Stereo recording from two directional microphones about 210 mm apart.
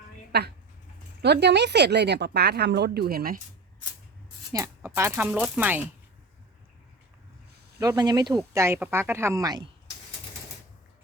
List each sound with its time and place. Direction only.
0.3 s speech: 50° right (ahead or behind)
4.5 s speech: 15° right (ahead or behind)
7.8 s speech: 20° right (ahead or behind)